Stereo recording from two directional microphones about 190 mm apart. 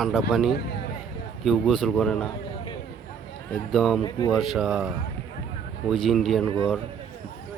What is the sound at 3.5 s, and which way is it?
Speech, centre (ahead or behind).